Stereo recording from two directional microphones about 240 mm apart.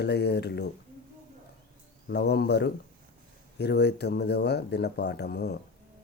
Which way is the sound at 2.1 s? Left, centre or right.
Left.